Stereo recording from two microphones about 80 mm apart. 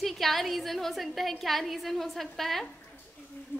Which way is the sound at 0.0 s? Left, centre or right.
Centre.